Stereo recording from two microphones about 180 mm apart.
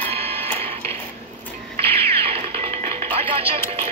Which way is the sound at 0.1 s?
35° right (ahead or behind).